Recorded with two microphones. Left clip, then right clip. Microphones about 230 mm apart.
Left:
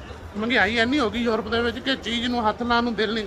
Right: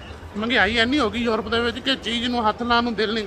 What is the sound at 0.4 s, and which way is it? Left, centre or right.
A man's voice, centre.